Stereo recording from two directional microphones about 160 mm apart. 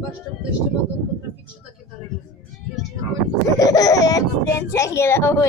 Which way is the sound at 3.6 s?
20° left (ahead or behind).